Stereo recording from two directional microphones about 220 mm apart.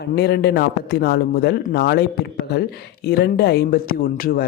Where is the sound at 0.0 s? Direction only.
45° left (ahead or behind).